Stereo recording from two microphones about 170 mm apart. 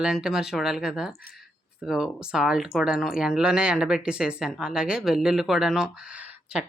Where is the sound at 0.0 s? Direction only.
5° right (ahead or behind).